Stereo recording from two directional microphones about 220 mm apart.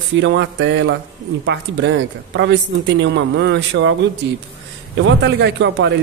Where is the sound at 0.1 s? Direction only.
55° right (ahead or behind).